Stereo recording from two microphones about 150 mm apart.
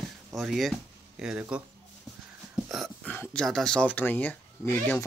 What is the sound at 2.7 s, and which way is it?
Speech, 5° left (ahead or behind).